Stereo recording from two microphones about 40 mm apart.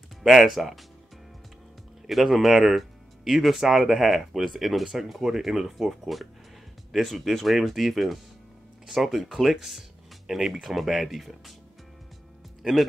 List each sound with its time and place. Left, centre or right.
0.2 s speech: centre
2.0 s speech: centre
7.3 s speech: centre